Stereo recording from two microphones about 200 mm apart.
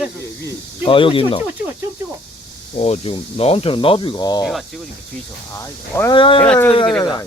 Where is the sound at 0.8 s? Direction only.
25° left (ahead or behind).